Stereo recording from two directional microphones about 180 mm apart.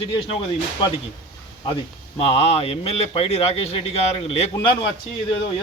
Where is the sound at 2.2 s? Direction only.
30° left (ahead or behind).